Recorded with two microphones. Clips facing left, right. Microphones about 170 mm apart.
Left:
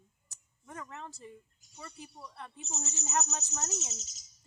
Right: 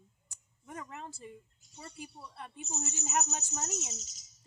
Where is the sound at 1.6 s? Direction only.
25° right (ahead or behind).